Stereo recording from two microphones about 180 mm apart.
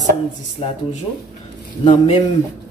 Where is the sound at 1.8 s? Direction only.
35° left (ahead or behind).